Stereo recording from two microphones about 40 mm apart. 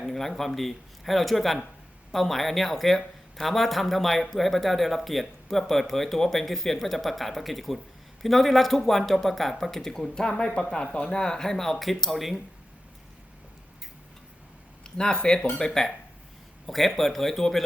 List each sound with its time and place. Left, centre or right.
0.0 s speech: centre
14.8 s speech: centre